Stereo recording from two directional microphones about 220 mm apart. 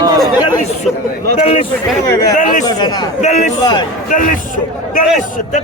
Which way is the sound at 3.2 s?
30° left (ahead or behind).